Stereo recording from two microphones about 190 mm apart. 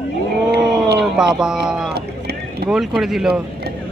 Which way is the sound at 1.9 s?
60° right (ahead or behind).